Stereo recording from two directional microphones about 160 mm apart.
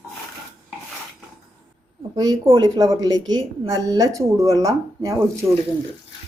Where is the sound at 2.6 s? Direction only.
20° right (ahead or behind).